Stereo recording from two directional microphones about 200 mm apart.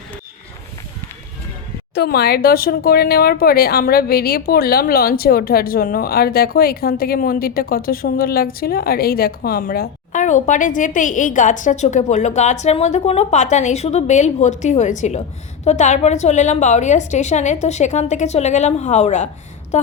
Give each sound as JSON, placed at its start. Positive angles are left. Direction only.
{"t": 2.0, "sound": "a woman's voice", "side_deg": 50}